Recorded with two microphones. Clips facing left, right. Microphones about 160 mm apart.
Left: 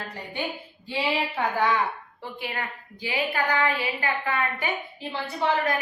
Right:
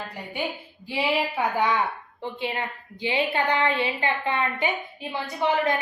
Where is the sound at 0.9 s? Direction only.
10° right (ahead or behind).